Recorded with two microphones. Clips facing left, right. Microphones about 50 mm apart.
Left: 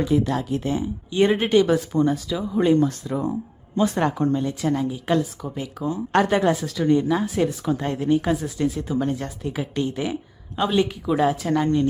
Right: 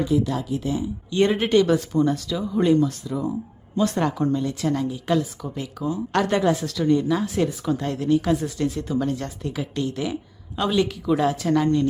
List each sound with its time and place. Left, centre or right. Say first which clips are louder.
0.1 s speech: left 1 dB; left
1.1 s speech: left 1 dB; centre
2.7 s speech: left 1 dB; left
3.8 s speech: left 1 dB; centre
4.6 s speech: left 1 dB; centre
6.1 s speech: left 3 dB; left
6.6 s speech: even; centre
6.8 s speech: left 1 dB; left
7.1 s speech: left 1 dB; centre
7.8 s speech: even; left
8.5 s speech: left 1 dB; centre
9.6 s speech: left 1 dB; left